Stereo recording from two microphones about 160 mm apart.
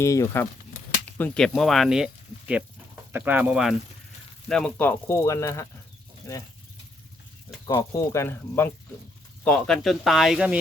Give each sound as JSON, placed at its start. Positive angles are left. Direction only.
{"t": 0.0, "sound": "speech", "side_deg": 20}
{"t": 1.2, "sound": "speech", "side_deg": 5}
{"t": 7.7, "sound": "speech", "side_deg": 20}
{"t": 9.4, "sound": "speech", "side_deg": 5}